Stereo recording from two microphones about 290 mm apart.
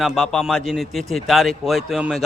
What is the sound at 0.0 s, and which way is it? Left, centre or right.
A man's voice, centre.